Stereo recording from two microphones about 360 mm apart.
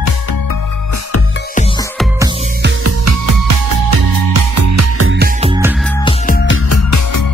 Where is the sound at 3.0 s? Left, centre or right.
Right.